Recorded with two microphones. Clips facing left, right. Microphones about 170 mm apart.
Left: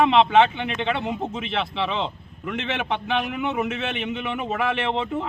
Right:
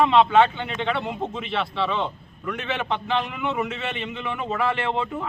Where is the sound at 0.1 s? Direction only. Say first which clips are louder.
Even; 20° left (ahead or behind).